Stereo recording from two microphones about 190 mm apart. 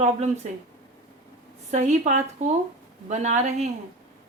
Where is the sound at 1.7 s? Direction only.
40° right (ahead or behind).